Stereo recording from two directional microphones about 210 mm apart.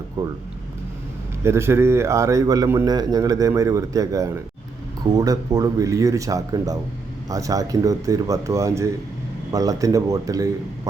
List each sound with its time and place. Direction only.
1.5 s a man's voice: 10° right (ahead or behind)